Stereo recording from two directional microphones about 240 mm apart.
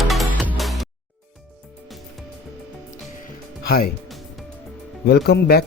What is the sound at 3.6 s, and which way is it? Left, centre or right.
Speech, left.